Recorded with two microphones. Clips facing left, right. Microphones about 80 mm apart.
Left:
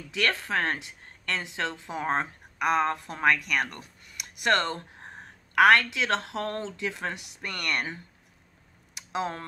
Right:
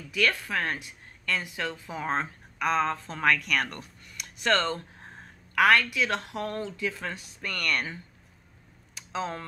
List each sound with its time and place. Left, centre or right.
0.1 s a woman's voice: left
4.5 s a woman's voice: left
8.9 s a sound: centre